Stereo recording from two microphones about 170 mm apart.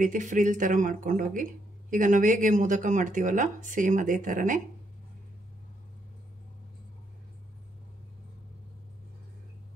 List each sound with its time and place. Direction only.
0.0 s speech: 50° right (ahead or behind)